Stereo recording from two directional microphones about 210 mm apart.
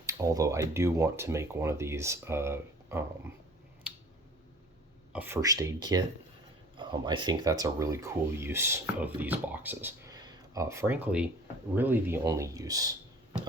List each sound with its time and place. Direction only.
0.0 s speech: 15° right (ahead or behind)
5.1 s speech: 10° right (ahead or behind)